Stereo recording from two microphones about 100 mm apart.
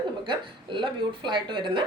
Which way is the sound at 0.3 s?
55° right (ahead or behind).